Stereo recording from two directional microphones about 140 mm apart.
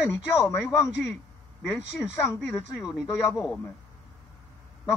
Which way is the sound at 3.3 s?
Centre (ahead or behind).